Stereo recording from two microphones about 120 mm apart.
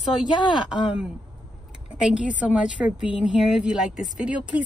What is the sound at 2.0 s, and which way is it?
A woman's voice, 10° right (ahead or behind).